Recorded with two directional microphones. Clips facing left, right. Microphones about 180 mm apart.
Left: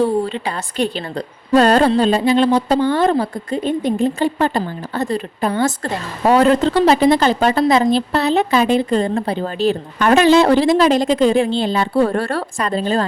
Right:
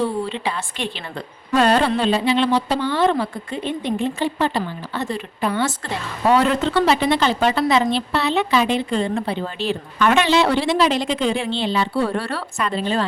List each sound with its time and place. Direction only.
0.0 s a woman's voice: 40° left (ahead or behind)